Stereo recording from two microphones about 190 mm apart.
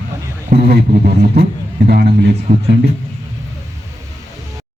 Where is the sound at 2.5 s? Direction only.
45° right (ahead or behind).